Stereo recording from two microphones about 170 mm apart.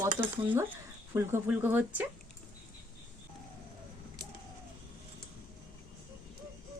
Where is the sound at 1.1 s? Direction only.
15° right (ahead or behind).